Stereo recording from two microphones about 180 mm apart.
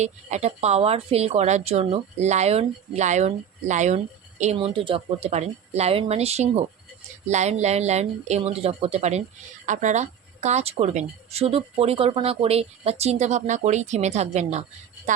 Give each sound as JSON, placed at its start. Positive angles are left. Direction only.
{"t": 0.0, "sound": "a woman's voice", "side_deg": -40}